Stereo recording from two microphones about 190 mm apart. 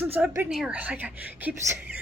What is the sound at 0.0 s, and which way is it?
A woman's voice, 10° right (ahead or behind).